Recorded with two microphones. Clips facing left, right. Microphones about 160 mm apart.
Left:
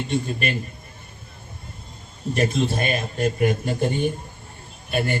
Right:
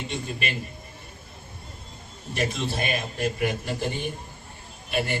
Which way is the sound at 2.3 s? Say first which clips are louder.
Left 6 dB; 45° left (ahead or behind).